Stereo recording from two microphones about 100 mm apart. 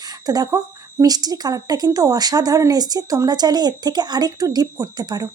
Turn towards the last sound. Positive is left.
turn(degrees=-40)  # may be behind; listen again after turning